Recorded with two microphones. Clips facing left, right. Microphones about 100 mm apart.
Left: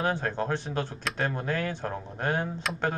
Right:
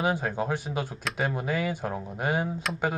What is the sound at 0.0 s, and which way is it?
Speech, 10° right (ahead or behind).